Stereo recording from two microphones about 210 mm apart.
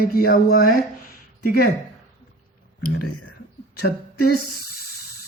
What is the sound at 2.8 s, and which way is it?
Speech, 90° left.